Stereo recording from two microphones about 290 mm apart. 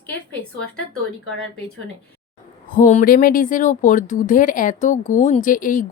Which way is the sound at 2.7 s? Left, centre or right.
Left.